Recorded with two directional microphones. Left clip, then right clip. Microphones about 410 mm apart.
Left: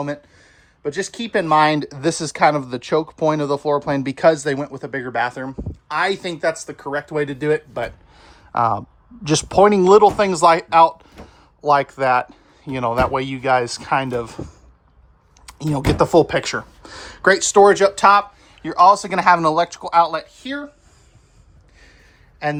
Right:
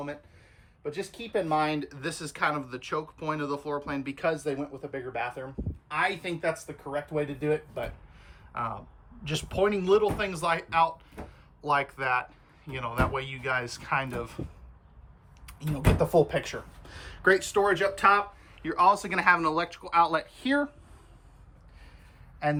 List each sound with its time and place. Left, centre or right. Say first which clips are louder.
0.8 s speech: left 11 dB; centre
7.7 s a sound: left 10 dB; centre
9.2 s speech: left 14 dB; centre
15.4 s speech: left 9 dB; centre
22.4 s speech: left 6 dB; centre